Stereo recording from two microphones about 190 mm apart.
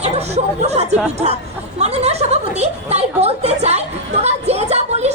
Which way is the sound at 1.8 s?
35° right (ahead or behind).